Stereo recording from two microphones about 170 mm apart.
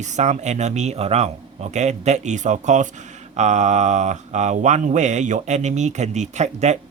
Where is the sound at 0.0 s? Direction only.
45° right (ahead or behind).